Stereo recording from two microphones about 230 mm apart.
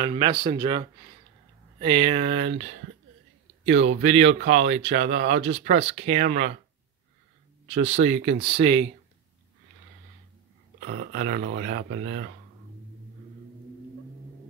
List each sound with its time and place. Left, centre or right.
0.0 s speech: centre
3.6 s speech: right
7.6 s speech: right
10.9 s speech: right